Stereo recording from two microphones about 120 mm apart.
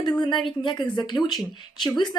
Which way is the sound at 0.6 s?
45° left (ahead or behind).